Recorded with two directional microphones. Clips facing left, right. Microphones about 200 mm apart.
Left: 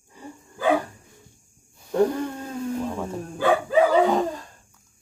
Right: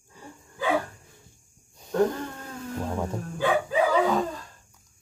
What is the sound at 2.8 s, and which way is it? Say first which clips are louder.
Dog: left 1 dB; 15° right (ahead or behind).